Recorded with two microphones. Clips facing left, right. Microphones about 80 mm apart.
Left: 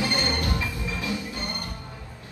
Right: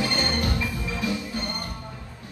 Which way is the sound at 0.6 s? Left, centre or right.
Right.